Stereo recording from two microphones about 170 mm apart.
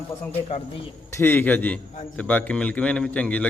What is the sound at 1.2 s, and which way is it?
A man's voice, 10° left (ahead or behind).